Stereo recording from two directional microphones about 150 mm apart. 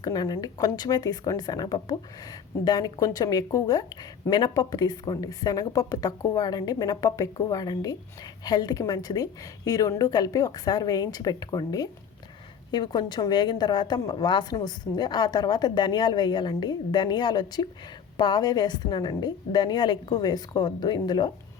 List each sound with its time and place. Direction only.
0.0 s a woman's voice: 25° left (ahead or behind)